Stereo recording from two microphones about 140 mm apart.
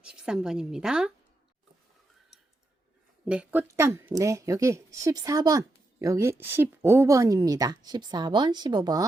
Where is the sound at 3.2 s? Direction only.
10° right (ahead or behind).